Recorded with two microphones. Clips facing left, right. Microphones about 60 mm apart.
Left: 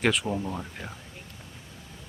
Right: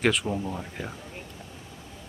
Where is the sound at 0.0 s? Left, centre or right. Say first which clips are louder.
Right 1 dB; centre.